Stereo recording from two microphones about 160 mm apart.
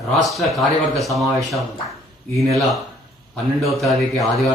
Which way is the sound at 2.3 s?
Centre (ahead or behind).